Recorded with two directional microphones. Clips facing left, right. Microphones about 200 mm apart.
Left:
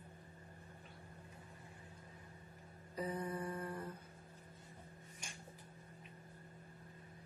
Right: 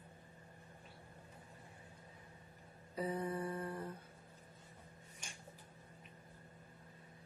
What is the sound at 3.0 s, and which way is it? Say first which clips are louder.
Speech: right 2 dB; 25° right (ahead or behind).